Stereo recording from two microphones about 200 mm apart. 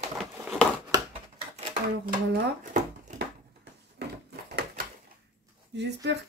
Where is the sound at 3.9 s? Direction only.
55° right (ahead or behind).